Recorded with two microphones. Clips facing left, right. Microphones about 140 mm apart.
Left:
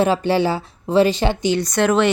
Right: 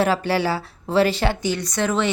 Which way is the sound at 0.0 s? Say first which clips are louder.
Left 3 dB; 20° left (ahead or behind).